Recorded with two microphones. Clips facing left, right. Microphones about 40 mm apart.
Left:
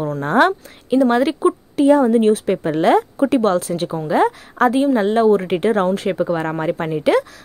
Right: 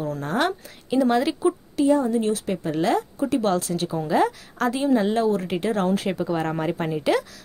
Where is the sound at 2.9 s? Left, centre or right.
Left.